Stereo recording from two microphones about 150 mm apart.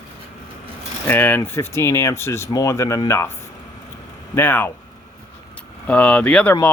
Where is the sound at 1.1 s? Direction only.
10° left (ahead or behind).